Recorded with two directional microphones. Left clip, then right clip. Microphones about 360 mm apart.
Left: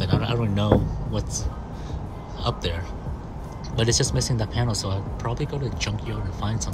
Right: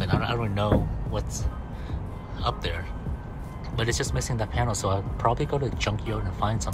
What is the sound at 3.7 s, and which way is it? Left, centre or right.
Speech, centre.